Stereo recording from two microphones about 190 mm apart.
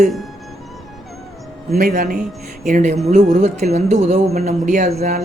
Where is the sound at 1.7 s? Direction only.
45° right (ahead or behind).